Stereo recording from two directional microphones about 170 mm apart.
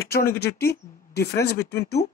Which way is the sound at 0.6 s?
70° left (ahead or behind).